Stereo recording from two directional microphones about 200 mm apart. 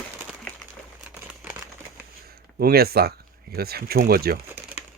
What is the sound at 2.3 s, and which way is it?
Speech, 50° right (ahead or behind).